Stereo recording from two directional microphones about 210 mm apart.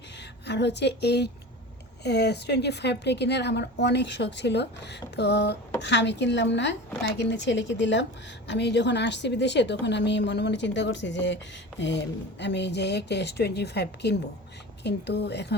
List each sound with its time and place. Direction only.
0.2 s a woman's voice: 55° left (ahead or behind)